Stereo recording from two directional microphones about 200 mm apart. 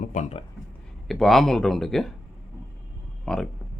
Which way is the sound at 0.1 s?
35° left (ahead or behind).